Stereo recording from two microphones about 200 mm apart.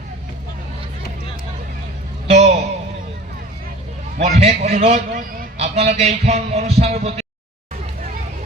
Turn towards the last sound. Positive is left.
turn(degrees=-30)  # may be behind; listen again after turning